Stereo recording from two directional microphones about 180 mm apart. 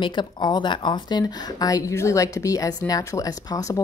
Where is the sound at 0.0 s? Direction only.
25° left (ahead or behind).